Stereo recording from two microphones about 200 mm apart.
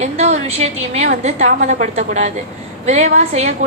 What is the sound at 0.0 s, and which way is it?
A woman's voice, 35° right (ahead or behind).